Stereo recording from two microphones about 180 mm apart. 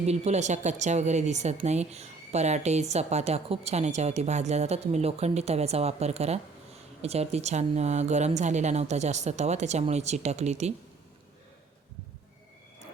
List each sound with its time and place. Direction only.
0.0 s speech: 40° right (ahead or behind)